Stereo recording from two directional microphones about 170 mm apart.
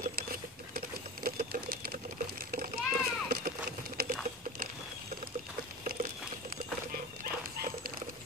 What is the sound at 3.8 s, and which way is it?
Patter, 60° right (ahead or behind).